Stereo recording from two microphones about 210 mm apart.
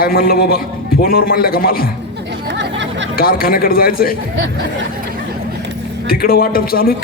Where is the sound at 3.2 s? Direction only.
45° left (ahead or behind).